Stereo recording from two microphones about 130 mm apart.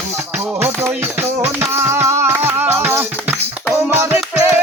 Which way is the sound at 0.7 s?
20° right (ahead or behind).